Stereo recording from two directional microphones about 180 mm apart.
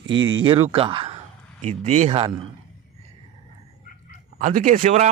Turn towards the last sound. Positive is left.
turn(degrees=-45)  # may be behind; listen again after turning